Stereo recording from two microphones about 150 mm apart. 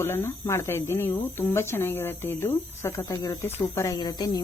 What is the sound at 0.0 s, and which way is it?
Speech, 20° left (ahead or behind).